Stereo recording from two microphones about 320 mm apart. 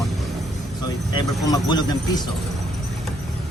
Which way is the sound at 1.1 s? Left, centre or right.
Centre.